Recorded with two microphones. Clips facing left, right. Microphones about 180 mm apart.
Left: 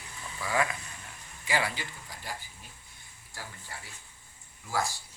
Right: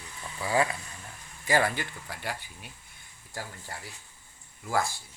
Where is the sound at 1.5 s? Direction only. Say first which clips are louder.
Right 5 dB; 50° right (ahead or behind).